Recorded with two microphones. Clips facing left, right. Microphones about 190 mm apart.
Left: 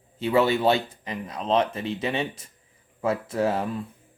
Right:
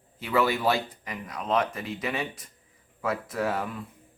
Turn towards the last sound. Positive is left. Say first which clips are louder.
# left 4 dB
turn(degrees=25)  # may be behind; listen again after turning